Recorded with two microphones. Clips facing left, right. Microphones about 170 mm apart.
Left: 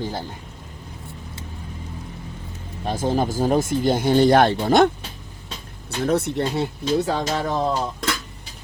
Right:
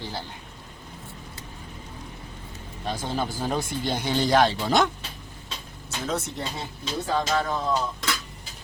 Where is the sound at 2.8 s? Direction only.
45° left (ahead or behind).